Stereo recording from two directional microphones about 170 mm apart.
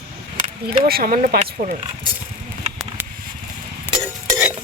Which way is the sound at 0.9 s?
60° right (ahead or behind).